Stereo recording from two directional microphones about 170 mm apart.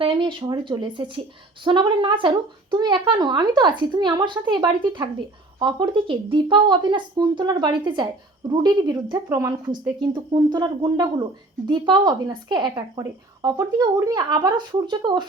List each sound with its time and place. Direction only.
0.0 s speech: 30° right (ahead or behind)